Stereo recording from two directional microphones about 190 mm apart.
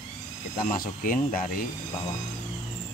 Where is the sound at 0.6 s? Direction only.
45° left (ahead or behind).